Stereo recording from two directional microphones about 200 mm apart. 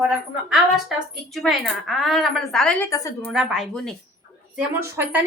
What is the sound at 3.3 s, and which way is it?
Speech, centre (ahead or behind).